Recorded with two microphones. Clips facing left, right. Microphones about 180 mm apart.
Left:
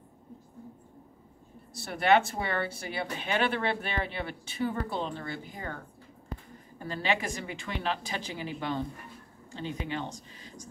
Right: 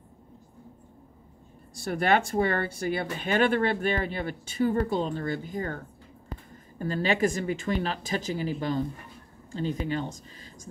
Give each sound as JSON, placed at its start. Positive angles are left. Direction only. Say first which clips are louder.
{"t": 1.9, "sound": "speech", "louder": "even", "side_deg": -45}
{"t": 6.8, "sound": "speech", "louder": "right 6 dB", "side_deg": -45}